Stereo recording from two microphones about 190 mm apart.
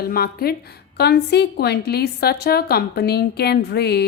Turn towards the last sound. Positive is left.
turn(degrees=60)  # may be behind; listen again after turning